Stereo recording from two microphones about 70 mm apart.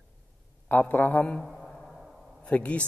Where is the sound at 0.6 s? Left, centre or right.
Left.